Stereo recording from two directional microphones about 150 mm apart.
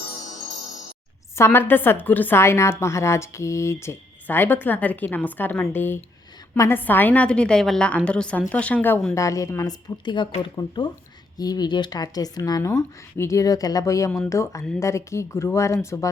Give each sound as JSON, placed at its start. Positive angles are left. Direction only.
{"t": 1.4, "sound": "a woman's voice", "side_deg": 15}